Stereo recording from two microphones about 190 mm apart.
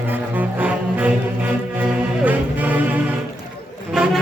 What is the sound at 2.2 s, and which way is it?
Music, 10° right (ahead or behind).